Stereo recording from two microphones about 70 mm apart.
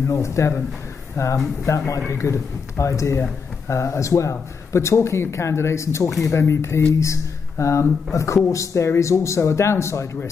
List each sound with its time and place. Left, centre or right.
0.1 s a man's voice: left